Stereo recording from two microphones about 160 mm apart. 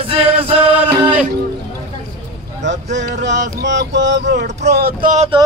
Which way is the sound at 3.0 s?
90° right.